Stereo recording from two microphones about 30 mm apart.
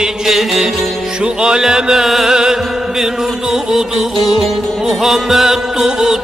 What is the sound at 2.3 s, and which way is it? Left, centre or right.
Music, centre.